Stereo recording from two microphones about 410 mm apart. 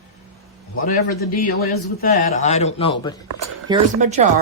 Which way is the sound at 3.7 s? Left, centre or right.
Centre.